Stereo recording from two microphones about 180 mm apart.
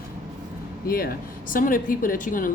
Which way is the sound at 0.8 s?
55° left (ahead or behind).